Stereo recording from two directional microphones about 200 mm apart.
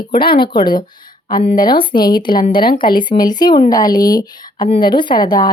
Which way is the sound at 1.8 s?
20° left (ahead or behind).